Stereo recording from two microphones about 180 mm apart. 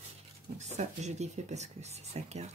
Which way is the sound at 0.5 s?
40° right (ahead or behind).